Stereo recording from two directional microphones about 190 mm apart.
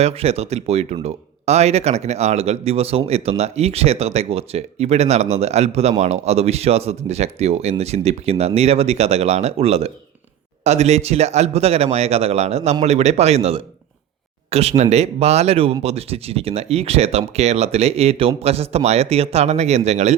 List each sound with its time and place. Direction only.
0.0 s speech: 30° right (ahead or behind)